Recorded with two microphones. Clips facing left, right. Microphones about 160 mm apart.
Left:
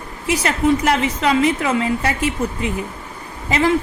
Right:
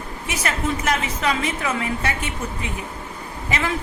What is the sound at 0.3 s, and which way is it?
A woman's voice, 30° left (ahead or behind).